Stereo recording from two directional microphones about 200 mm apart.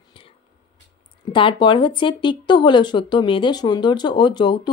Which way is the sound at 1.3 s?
25° left (ahead or behind).